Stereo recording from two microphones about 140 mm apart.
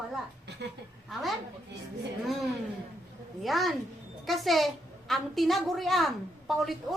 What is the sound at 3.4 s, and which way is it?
A woman's voice, centre (ahead or behind).